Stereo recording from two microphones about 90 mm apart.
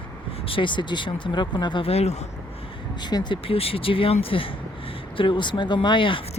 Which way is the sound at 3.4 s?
90° left.